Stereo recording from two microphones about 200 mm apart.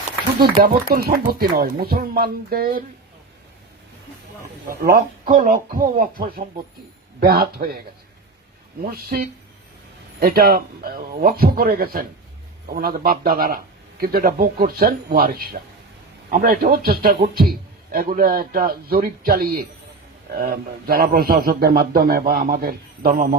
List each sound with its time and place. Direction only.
0.3 s a man's voice: 50° right (ahead or behind)
4.7 s a man's voice: 45° right (ahead or behind)
8.8 s a man's voice: 50° right (ahead or behind)